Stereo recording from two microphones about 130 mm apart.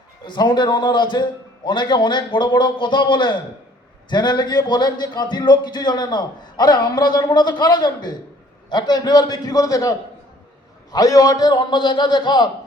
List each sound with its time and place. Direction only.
0.3 s speech: 35° left (ahead or behind)
10.9 s speech: 30° left (ahead or behind)